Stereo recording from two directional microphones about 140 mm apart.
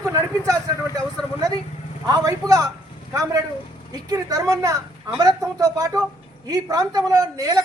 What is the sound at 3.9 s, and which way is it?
A woman's voice, 25° right (ahead or behind).